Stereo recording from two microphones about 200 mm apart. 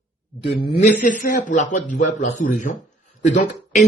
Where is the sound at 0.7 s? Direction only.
40° left (ahead or behind).